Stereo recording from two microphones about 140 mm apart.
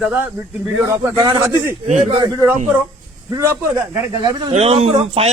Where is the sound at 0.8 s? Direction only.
25° right (ahead or behind).